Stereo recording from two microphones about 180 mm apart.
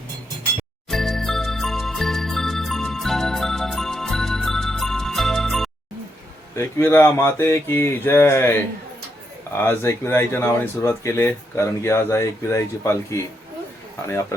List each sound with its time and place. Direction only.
0.9 s music: centre (ahead or behind)
6.6 s speech: 15° left (ahead or behind)
9.6 s speech: 10° left (ahead or behind)